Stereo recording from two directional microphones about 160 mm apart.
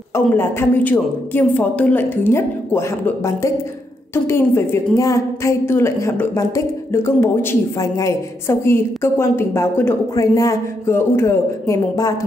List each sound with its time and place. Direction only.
0.1 s a woman's voice: 15° left (ahead or behind)